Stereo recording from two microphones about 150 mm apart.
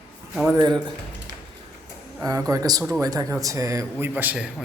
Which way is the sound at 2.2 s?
25° right (ahead or behind).